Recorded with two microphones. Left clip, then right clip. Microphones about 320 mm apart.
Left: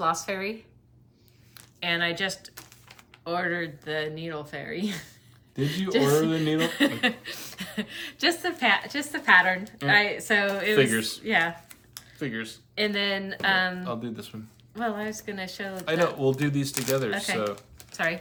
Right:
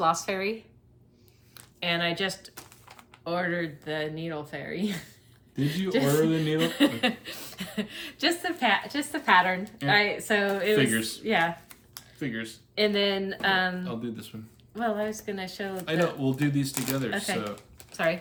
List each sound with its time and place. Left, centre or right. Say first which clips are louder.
0.0 s speech: right 1 dB; centre
1.5 s a woman's voice: left 1 dB; centre
6.2 s speech: left 1 dB; centre
6.6 s a woman's voice: even; centre
10.8 s speech: left 3 dB; centre
11.2 s a woman's voice: even; centre
12.2 s speech: left 1 dB; centre
12.7 s a woman's voice: right 1 dB; centre
13.8 s speech: left 2 dB; centre
14.8 s a woman's voice: right 2 dB; centre
16.2 s speech: left 3 dB; centre
17.1 s a woman's voice: left 3 dB; centre